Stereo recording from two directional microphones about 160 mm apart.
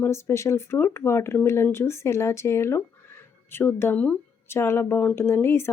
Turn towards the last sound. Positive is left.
turn(degrees=15)  # may be behind; listen again after turning